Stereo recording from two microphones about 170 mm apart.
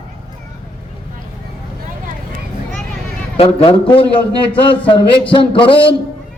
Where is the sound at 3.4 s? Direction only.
35° left (ahead or behind).